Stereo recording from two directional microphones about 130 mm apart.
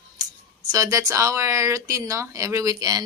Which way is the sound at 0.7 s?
25° right (ahead or behind).